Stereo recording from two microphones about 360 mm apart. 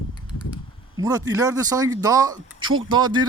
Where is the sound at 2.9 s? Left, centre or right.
Centre.